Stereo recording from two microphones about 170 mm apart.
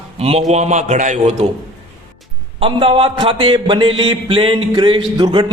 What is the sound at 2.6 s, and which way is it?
Mantra, 35° right (ahead or behind).